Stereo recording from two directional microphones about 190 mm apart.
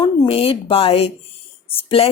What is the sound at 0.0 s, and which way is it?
Speech, 25° left (ahead or behind).